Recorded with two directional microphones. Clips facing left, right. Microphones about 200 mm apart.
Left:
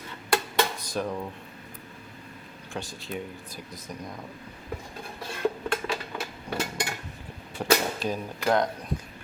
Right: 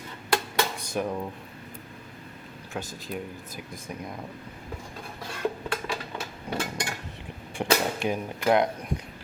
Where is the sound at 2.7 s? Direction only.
Centre (ahead or behind).